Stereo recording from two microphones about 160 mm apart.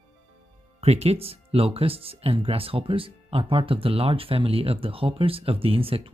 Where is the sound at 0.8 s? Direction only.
40° right (ahead or behind).